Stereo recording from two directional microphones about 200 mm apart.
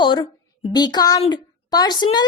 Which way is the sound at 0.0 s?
20° left (ahead or behind).